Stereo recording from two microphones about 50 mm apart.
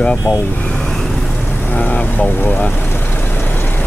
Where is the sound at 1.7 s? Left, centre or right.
Left.